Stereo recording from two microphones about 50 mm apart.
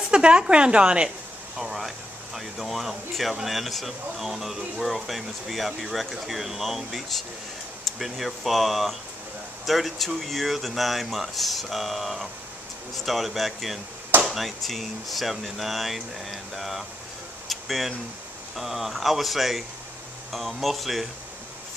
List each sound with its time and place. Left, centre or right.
0.1 s a woman's voice: right
1.6 s speech: centre
17.5 s a sound: centre
18.6 s speech: centre